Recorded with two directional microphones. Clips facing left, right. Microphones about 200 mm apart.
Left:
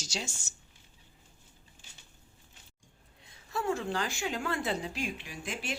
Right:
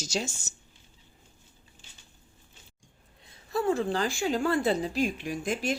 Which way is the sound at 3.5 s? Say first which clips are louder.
Right 5 dB; 35° right (ahead or behind).